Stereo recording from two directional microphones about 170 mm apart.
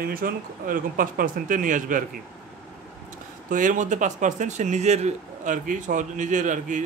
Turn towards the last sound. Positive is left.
turn(degrees=-45)  # may be behind; listen again after turning